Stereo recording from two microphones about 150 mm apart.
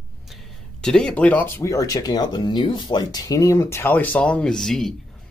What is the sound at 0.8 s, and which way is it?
Speech, 5° left (ahead or behind).